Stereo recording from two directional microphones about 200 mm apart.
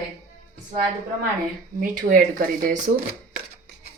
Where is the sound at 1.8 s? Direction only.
45° right (ahead or behind).